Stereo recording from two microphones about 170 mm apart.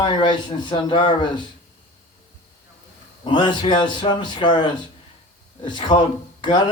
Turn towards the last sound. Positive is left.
turn(degrees=25)  # may be behind; listen again after turning